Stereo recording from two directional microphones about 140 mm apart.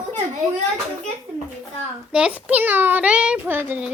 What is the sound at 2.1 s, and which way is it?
A child's voice, 10° right (ahead or behind).